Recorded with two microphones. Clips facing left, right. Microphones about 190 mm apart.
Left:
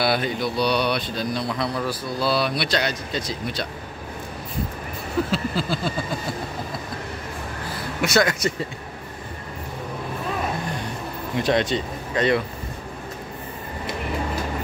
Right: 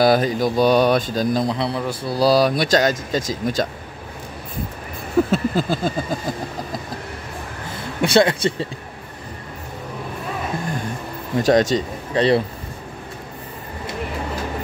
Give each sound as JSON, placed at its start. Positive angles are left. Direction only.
{"t": 0.0, "sound": "speech", "side_deg": -40}
{"t": 1.6, "sound": "speech", "side_deg": -25}
{"t": 2.1, "sound": "speech", "side_deg": -40}
{"t": 5.3, "sound": "a sound", "side_deg": -45}
{"t": 8.0, "sound": "speech", "side_deg": -30}
{"t": 11.3, "sound": "speech", "side_deg": -40}